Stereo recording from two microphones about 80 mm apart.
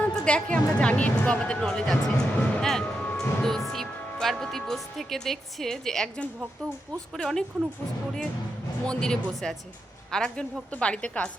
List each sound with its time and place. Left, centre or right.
0.0 s speech: centre
2.8 s music: centre
3.2 s speech: centre
8.9 s speech: centre